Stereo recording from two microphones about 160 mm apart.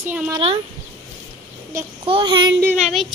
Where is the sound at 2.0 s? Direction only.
30° right (ahead or behind).